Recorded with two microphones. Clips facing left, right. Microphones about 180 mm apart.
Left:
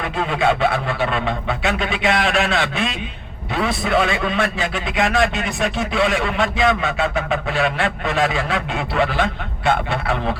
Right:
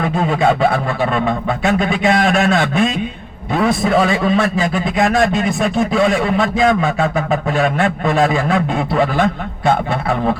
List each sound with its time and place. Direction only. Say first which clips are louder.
0.2 s a man's voice: right 3 dB; 45° right (ahead or behind)